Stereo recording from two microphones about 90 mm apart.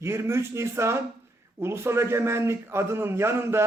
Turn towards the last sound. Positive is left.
turn(degrees=-30)  # may be behind; listen again after turning